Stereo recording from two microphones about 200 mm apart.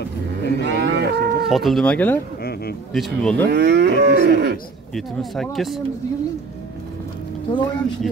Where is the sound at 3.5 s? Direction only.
55° right (ahead or behind).